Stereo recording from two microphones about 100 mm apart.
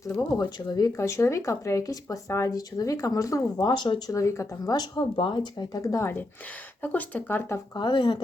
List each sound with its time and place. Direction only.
0.3 s speech: 40° left (ahead or behind)
4.1 s speech: 30° left (ahead or behind)
7.8 s speech: 50° left (ahead or behind)